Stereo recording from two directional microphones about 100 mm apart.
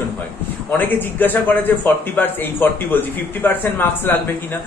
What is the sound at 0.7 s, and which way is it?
Speech, 20° left (ahead or behind).